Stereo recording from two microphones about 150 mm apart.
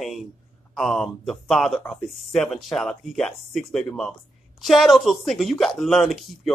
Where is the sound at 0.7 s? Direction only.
5° left (ahead or behind).